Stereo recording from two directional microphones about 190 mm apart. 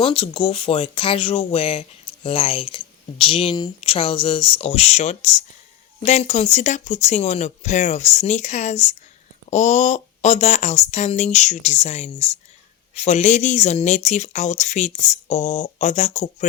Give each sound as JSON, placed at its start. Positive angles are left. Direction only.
{"t": 0.0, "sound": "speech", "side_deg": 30}